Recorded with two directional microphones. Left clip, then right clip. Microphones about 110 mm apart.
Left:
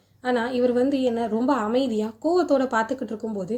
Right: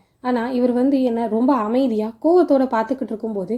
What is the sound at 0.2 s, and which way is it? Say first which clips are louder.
A woman's voice: right 2 dB; 40° right (ahead or behind).